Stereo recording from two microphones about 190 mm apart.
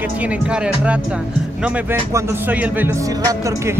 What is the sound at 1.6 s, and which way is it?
Speech, 10° right (ahead or behind).